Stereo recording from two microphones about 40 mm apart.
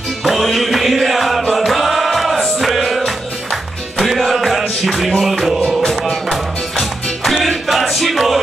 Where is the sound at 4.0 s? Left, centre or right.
Centre.